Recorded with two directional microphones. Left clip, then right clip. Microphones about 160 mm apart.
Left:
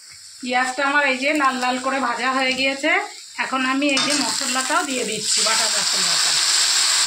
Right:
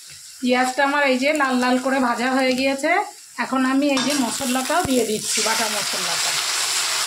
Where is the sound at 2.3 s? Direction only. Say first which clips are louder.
Even; 85° right.